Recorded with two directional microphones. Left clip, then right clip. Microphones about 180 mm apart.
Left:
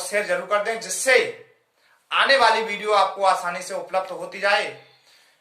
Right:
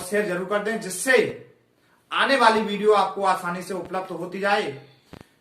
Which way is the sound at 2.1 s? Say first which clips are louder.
Left 1 dB; 20° left (ahead or behind).